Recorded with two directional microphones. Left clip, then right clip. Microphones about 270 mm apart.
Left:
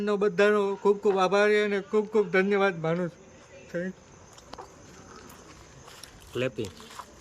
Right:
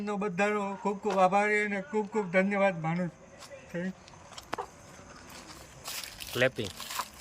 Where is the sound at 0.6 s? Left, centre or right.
Centre.